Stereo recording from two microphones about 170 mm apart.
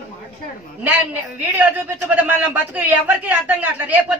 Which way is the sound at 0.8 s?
10° right (ahead or behind).